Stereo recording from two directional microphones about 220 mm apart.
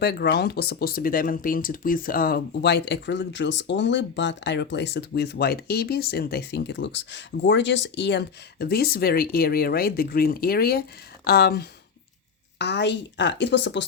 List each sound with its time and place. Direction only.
0.0 s speech: 50° left (ahead or behind)